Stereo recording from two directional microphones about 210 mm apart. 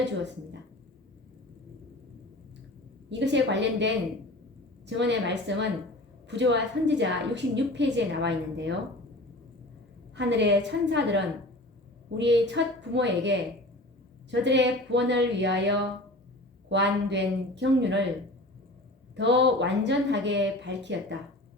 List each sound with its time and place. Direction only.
3.1 s a woman's voice: 55° right (ahead or behind)
10.2 s a woman's voice: 55° right (ahead or behind)
19.1 s a woman's voice: 55° right (ahead or behind)